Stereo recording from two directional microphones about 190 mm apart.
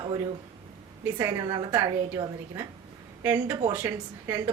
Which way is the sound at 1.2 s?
20° right (ahead or behind).